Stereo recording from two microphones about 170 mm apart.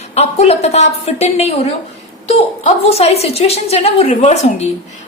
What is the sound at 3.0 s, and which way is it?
A woman's voice, 40° left (ahead or behind).